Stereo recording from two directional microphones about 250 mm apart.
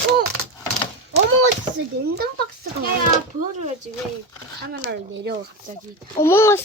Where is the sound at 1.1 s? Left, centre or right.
Right.